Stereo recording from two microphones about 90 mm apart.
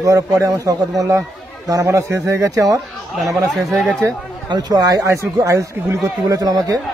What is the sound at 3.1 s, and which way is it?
Speech, centre (ahead or behind).